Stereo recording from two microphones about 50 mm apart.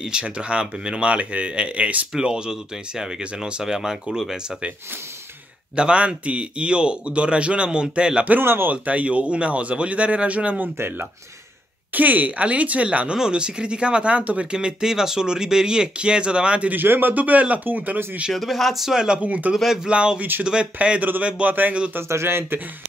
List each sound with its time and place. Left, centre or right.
0.0 s speech: centre
2.1 s speech: centre
5.8 s speech: right
11.9 s speech: right
16.7 s speech: right
18.3 s speech: centre
19.2 s speech: right
19.5 s speech: centre
19.9 s speech: right
20.2 s speech: right
20.4 s speech: right
21.5 s speech: right
22.1 s speech: right